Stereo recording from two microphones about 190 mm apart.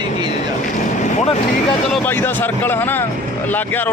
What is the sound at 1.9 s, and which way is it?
Speech, 10° left (ahead or behind).